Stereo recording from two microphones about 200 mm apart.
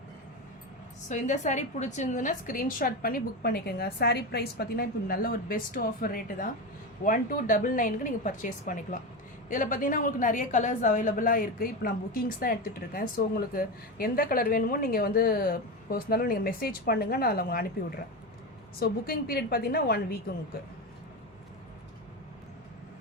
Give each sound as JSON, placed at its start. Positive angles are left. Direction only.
{"t": 1.0, "sound": "a woman's voice", "side_deg": 35}
{"t": 18.8, "sound": "a woman's voice", "side_deg": 50}